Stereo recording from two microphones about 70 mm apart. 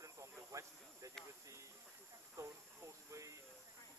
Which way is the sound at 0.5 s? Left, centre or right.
Right.